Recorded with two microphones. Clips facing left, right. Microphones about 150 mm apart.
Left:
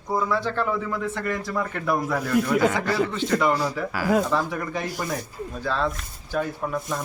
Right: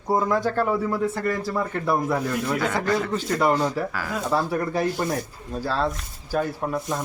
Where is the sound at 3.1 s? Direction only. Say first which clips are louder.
Right 1 dB; 35° right (ahead or behind).